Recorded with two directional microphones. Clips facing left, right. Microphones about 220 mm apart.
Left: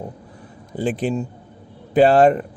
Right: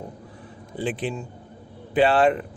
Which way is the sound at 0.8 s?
40° left (ahead or behind).